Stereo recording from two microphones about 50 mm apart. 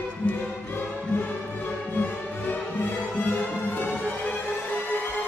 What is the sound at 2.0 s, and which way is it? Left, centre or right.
Music, left.